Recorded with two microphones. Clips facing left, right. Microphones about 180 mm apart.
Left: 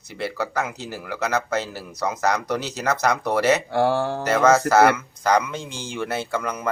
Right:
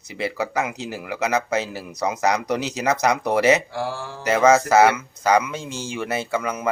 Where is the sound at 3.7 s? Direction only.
65° left (ahead or behind).